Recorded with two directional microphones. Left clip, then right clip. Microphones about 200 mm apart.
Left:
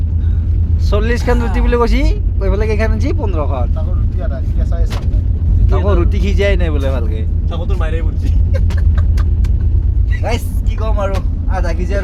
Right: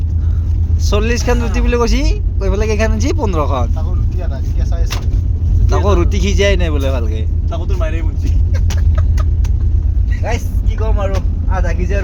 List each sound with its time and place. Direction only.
0.9 s speech: 5° right (ahead or behind)
3.2 s speech: 20° right (ahead or behind)
5.7 s a man's voice: 10° right (ahead or behind)
10.8 s speech: 10° left (ahead or behind)